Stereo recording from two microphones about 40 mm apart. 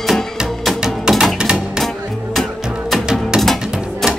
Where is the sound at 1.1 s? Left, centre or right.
Centre.